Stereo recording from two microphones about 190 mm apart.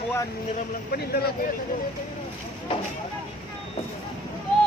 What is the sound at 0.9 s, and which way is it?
Speech, 55° left (ahead or behind).